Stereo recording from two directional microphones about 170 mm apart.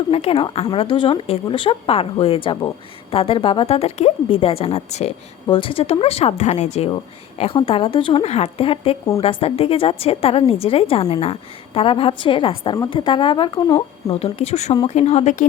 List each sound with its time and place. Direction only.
0.1 s a woman's voice: 35° left (ahead or behind)
14.3 s a woman's voice: 40° left (ahead or behind)